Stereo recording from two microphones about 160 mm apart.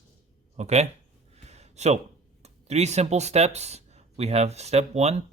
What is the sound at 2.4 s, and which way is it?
Speech, 45° right (ahead or behind).